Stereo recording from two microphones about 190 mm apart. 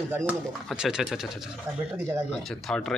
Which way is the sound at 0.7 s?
Centre (ahead or behind).